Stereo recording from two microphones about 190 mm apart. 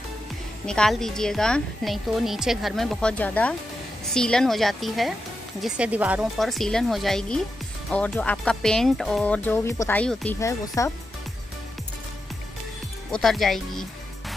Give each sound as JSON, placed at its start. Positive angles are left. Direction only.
{"t": 0.7, "sound": "a woman's voice", "side_deg": 5}
{"t": 10.4, "sound": "speech", "side_deg": 15}
{"t": 13.1, "sound": "a woman's voice", "side_deg": 0}